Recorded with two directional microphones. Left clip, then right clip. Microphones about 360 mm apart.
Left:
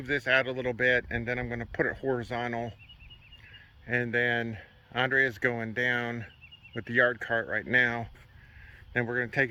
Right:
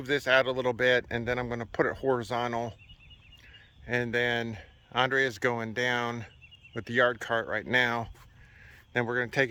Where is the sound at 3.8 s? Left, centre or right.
Centre.